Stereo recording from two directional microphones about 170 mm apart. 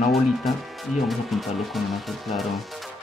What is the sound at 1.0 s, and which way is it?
Speech, centre (ahead or behind).